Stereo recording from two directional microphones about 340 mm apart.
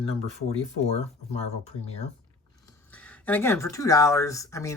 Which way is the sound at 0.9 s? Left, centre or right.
Centre.